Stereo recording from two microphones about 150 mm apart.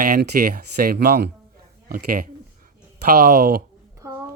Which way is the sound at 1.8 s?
75° right (ahead or behind).